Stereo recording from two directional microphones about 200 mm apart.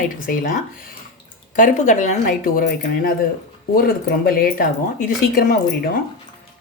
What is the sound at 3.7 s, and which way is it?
Speech, 45° left (ahead or behind).